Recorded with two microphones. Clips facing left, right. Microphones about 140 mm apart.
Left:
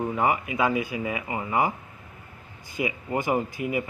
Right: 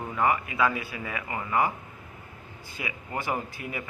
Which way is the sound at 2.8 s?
10° left (ahead or behind).